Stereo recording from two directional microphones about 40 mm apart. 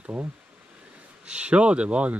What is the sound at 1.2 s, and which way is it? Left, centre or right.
Speech, right.